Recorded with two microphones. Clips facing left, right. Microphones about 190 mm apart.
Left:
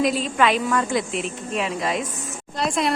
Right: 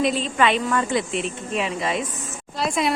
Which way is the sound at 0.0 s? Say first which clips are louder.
Even; centre (ahead or behind).